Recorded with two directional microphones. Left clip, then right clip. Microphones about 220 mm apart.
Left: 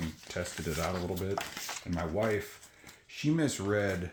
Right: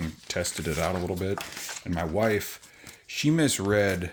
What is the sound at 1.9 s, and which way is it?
Speech, 50° right (ahead or behind).